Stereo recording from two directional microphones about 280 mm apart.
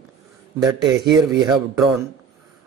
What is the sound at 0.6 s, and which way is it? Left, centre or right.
Speech, centre.